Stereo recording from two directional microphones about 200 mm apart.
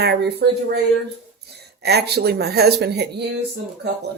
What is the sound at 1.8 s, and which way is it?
Speech, 55° right (ahead or behind).